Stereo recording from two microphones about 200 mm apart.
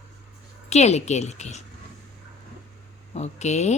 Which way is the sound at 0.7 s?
35° left (ahead or behind).